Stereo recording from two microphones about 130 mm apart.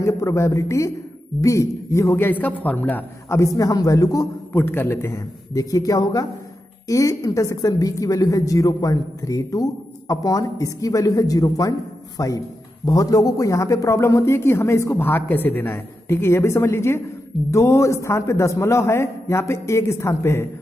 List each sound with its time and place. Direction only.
0.0 s speech: 25° left (ahead or behind)